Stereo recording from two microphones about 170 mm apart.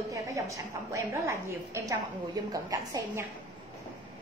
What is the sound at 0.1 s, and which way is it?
A woman's voice, 20° right (ahead or behind).